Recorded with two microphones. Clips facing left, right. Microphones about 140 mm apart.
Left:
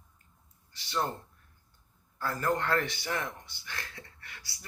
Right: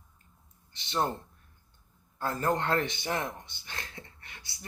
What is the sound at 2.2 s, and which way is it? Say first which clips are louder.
Speech: right 1 dB; 20° right (ahead or behind).